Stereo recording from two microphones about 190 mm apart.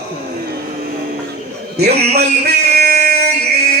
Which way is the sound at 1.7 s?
60° right (ahead or behind).